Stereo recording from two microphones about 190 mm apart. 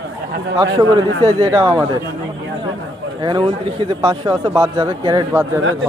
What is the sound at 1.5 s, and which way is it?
Speech, 20° right (ahead or behind).